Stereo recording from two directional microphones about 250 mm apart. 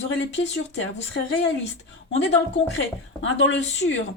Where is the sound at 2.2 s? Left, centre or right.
Left.